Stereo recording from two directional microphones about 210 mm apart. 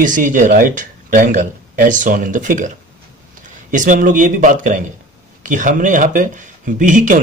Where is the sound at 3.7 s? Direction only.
40° right (ahead or behind).